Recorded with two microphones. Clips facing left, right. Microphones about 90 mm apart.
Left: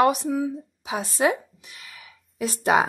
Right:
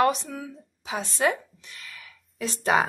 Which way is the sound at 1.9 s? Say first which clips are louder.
Left 5 dB; 30° left (ahead or behind).